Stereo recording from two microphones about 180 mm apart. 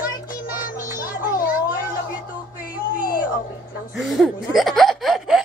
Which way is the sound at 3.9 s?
Centre (ahead or behind).